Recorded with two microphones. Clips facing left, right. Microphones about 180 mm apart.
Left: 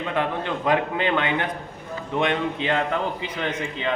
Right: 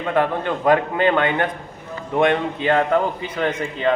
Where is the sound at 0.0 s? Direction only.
50° right (ahead or behind).